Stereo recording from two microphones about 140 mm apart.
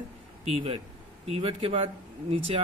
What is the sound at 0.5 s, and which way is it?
Speech, 45° right (ahead or behind).